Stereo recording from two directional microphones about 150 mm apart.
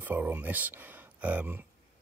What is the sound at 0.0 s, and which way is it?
Speech, 10° right (ahead or behind).